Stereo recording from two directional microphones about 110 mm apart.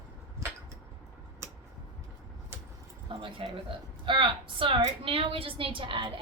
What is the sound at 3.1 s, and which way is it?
A woman's voice, 50° right (ahead or behind).